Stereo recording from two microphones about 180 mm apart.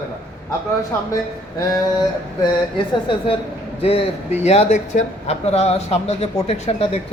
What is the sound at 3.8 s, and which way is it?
Speech, 35° left (ahead or behind).